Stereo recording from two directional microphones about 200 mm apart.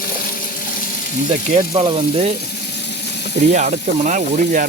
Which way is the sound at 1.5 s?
30° right (ahead or behind).